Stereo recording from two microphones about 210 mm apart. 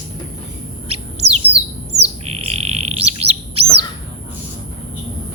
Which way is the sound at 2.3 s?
30° right (ahead or behind).